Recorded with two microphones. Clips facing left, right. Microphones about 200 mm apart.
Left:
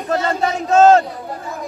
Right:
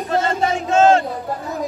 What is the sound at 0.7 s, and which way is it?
Crowd, 40° left (ahead or behind).